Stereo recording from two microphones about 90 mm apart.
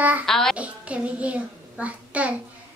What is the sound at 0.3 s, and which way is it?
Speech, 5° left (ahead or behind).